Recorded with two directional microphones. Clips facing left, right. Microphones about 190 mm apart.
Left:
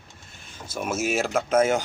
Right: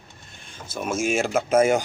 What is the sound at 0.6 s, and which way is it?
Speech, 10° left (ahead or behind).